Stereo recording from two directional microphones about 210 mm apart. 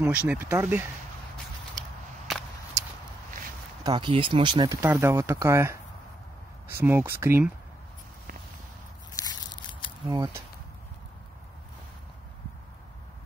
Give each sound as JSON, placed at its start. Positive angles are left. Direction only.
{"t": 0.0, "sound": "speech", "side_deg": -5}
{"t": 1.8, "sound": "whip", "side_deg": 0}
{"t": 3.8, "sound": "speech", "side_deg": -20}
{"t": 9.2, "sound": "a sound", "side_deg": 20}
{"t": 10.0, "sound": "speech", "side_deg": -15}